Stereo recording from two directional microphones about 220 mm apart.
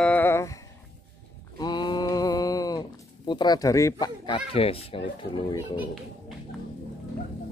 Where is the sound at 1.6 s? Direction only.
20° left (ahead or behind).